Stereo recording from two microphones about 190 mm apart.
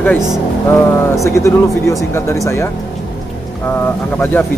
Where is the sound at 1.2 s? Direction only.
15° left (ahead or behind).